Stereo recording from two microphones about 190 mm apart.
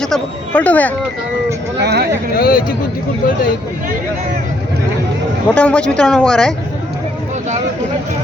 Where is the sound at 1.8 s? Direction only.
60° right (ahead or behind).